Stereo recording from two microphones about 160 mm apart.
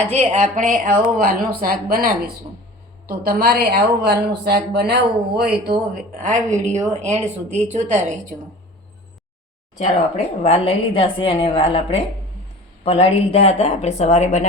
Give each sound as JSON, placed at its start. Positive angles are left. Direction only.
{"t": 0.1, "sound": "a woman's voice", "side_deg": -45}
{"t": 5.9, "sound": "a woman's voice", "side_deg": -50}
{"t": 9.7, "sound": "a woman's voice", "side_deg": 45}